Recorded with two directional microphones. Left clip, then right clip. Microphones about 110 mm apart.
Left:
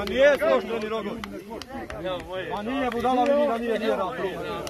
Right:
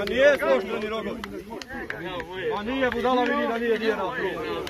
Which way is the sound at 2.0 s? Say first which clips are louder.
Even; 40° left (ahead or behind).